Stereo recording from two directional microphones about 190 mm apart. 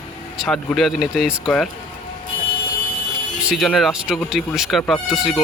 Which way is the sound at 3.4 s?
5° right (ahead or behind).